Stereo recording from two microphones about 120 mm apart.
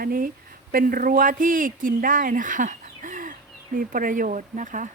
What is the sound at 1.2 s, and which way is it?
A woman's voice, 90° right.